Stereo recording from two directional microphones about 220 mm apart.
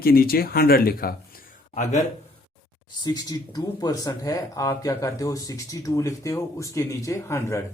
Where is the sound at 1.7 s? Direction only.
30° left (ahead or behind).